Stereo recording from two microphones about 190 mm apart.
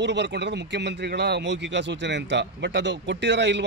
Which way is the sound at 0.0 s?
65° right (ahead or behind).